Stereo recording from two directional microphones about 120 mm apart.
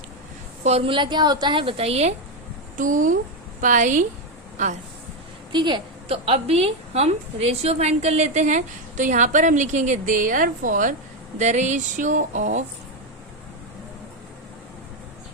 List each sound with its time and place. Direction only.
0.6 s a woman's voice: 60° right (ahead or behind)
2.7 s speech: 90° right
5.5 s a woman's voice: 40° right (ahead or behind)
6.1 s a woman's voice: 55° right (ahead or behind); by 10.9 s 90° right
11.3 s speech: 80° right